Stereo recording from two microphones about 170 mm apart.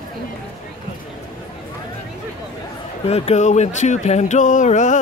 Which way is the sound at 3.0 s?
35° left (ahead or behind).